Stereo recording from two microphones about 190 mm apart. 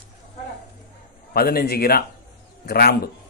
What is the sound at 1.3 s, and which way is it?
Speech, 55° left (ahead or behind).